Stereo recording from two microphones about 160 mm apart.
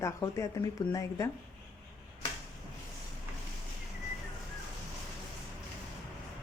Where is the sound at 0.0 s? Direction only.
20° left (ahead or behind).